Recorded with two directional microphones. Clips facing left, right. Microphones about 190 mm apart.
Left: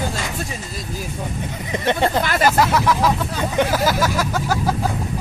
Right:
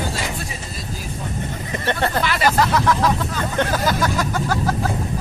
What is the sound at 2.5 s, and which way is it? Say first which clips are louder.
Speech: even; 10° left (ahead or behind).